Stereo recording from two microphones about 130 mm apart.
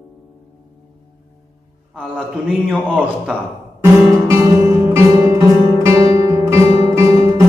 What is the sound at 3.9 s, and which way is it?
Music, 20° right (ahead or behind).